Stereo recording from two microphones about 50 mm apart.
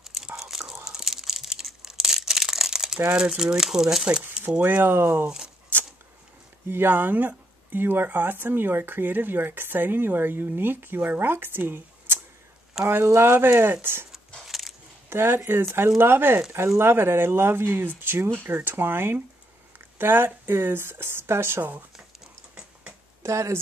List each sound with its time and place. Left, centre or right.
0.0 s whispering: centre
0.8 s tearing: centre
3.2 s speech: centre
4.6 s speech: right
5.7 s a sound: right
6.7 s speech: right
12.8 s speech: right
14.4 s a sound: centre
15.0 s speech: right
16.5 s speech: right
16.9 s speech: right
21.9 s a sound: centre
23.2 s speech: right